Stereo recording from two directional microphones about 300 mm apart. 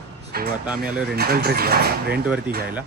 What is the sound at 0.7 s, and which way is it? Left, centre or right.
Speech, centre.